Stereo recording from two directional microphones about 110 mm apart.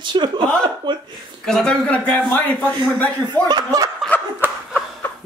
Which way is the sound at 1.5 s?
5° left (ahead or behind).